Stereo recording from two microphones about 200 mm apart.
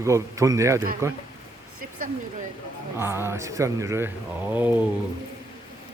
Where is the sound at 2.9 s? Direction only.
10° right (ahead or behind).